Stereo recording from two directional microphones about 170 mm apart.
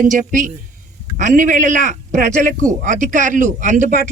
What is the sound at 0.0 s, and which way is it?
A man's voice, 50° right (ahead or behind).